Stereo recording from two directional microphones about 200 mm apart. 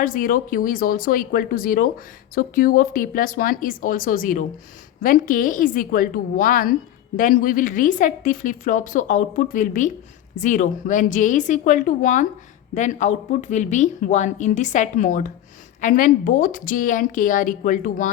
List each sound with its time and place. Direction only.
0.0 s a woman's voice: 45° left (ahead or behind)